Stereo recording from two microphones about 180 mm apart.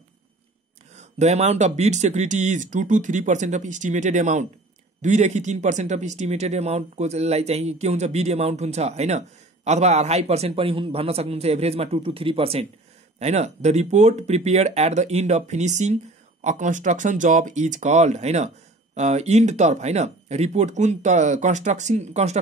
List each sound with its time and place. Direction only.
0.9 s speech: 40° right (ahead or behind)